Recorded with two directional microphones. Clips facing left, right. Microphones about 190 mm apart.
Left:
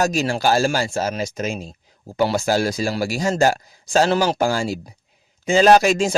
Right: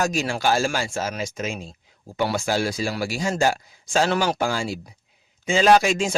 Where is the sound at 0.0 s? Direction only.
35° left (ahead or behind).